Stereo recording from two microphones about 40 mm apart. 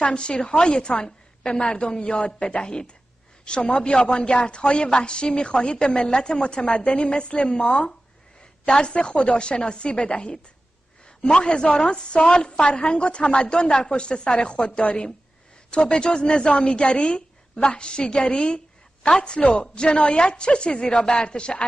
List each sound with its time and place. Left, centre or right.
0.0 s a woman's voice: left